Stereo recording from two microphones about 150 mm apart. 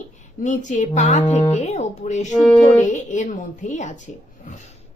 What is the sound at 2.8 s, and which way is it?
A woman's voice, 55° left (ahead or behind).